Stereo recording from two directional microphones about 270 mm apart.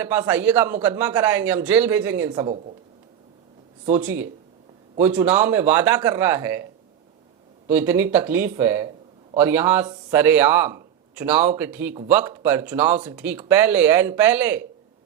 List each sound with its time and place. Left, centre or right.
0.0 s a man's voice: centre
3.9 s a man's voice: centre
7.7 s a man's voice: centre